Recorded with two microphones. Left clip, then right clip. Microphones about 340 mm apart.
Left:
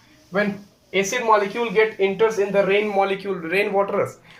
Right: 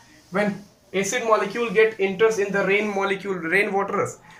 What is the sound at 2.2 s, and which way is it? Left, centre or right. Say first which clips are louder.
Speech: left 1 dB; centre.